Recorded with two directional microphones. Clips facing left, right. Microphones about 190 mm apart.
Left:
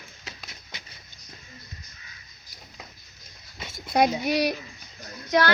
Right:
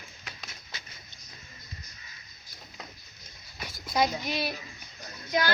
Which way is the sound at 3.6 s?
25° left (ahead or behind).